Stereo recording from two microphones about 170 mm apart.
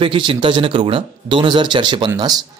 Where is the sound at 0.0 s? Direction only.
30° right (ahead or behind).